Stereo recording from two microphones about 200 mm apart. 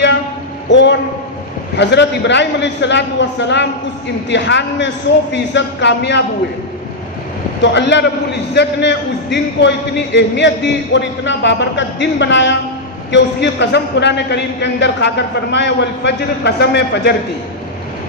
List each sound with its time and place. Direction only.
0.7 s a man's voice: 65° left (ahead or behind)
7.6 s a man's voice: 60° left (ahead or behind)